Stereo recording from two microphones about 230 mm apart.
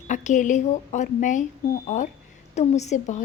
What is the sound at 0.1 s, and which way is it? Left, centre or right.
A woman's voice, left.